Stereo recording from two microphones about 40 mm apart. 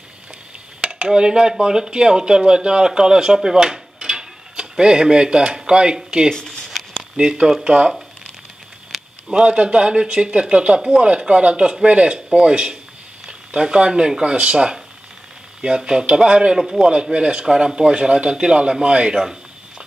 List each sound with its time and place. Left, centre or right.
0.7 s dishes: right
1.6 s speech: centre
3.3 s a man's voice: centre
3.6 s tick-tock: centre
6.0 s speech: right
6.7 s a sound: centre
7.2 s speech: centre
8.9 s a sound: centre
9.3 s speech: right
16.5 s a man's voice: centre
16.9 s speech: right